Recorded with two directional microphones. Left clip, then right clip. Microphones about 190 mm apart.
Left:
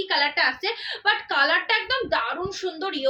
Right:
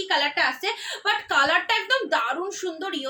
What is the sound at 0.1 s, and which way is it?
A woman's voice, 30° right (ahead or behind).